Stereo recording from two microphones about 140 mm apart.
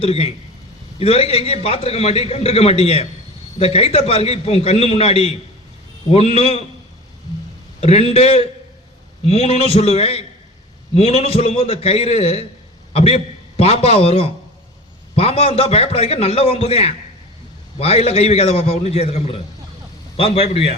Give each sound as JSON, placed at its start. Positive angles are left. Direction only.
{"t": 0.0, "sound": "a man's voice", "side_deg": 45}
{"t": 7.8, "sound": "a man's voice", "side_deg": 50}